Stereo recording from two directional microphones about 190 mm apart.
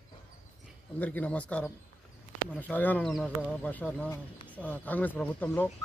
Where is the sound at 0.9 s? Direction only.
10° left (ahead or behind).